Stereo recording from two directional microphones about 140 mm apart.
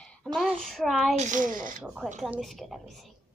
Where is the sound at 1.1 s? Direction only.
60° right (ahead or behind).